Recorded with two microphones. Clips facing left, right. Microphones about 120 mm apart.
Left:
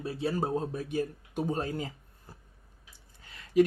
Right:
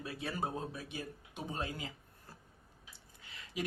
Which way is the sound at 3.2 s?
45° left (ahead or behind).